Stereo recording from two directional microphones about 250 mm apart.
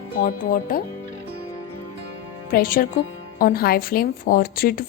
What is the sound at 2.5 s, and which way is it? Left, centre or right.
Speech, left.